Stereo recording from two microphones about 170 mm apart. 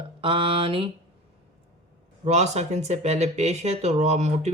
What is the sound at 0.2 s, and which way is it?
Speech, 30° right (ahead or behind).